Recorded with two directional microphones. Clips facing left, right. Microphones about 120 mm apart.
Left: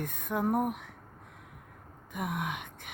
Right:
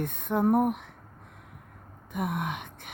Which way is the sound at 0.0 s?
25° right (ahead or behind).